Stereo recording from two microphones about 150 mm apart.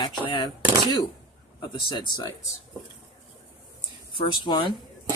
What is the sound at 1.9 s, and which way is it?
Speech, 30° left (ahead or behind).